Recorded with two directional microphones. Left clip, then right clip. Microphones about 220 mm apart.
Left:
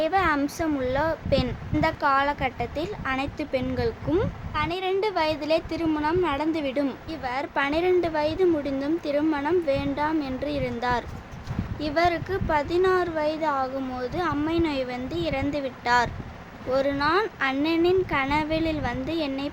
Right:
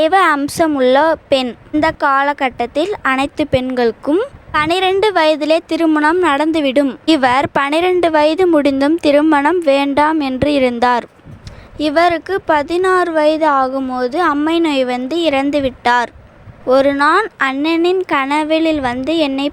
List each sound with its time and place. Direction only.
0.0 s a woman's voice: 40° right (ahead or behind)